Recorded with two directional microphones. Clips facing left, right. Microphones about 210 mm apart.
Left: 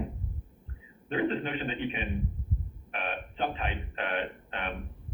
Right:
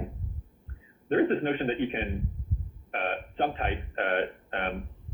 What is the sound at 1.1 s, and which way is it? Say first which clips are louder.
Speech: right 5 dB; 50° right (ahead or behind).